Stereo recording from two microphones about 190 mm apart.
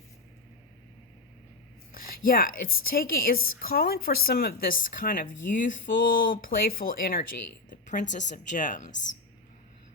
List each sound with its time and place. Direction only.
1.9 s a woman's voice: 50° left (ahead or behind)
8.9 s speech: 70° left (ahead or behind)